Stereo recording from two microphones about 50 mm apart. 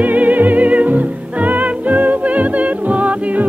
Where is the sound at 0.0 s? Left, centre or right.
Right.